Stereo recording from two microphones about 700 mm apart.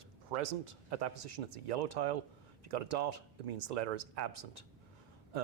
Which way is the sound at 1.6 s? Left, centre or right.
Right.